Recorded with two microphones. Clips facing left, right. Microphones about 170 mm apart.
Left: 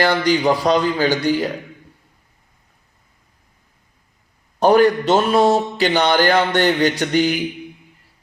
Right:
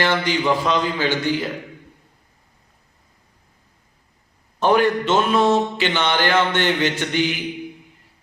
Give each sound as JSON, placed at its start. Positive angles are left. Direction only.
{"t": 0.0, "sound": "speech", "side_deg": 40}
{"t": 4.6, "sound": "speech", "side_deg": 40}